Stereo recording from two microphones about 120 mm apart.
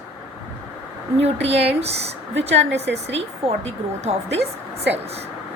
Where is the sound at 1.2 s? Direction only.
55° right (ahead or behind).